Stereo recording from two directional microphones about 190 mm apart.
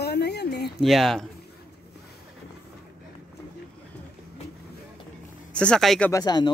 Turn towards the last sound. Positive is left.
turn(degrees=20)  # may be behind; listen again after turning